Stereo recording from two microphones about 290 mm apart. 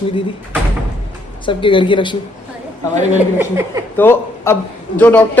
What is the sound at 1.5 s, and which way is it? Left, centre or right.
Speech, centre.